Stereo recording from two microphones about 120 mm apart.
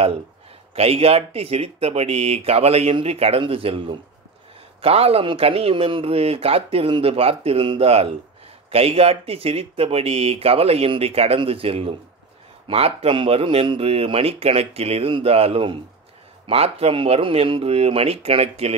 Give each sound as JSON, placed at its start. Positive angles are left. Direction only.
{"t": 0.7, "sound": "speech", "side_deg": -55}